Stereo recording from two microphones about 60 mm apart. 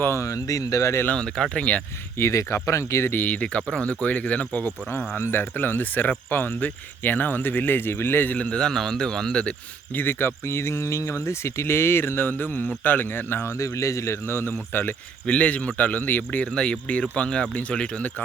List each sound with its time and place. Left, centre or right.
0.0 s speech: left
1.1 s speech: centre
2.1 s speech: left
3.1 s a man's voice: left
5.1 s speech: left; by 9.6 s centre
9.9 s speech: left
13.6 s speech: left
15.3 s a man's voice: left